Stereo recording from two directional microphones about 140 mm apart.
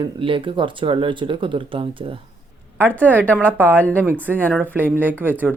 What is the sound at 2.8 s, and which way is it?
Speech, 10° left (ahead or behind).